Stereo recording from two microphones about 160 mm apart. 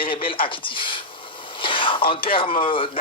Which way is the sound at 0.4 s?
30° left (ahead or behind).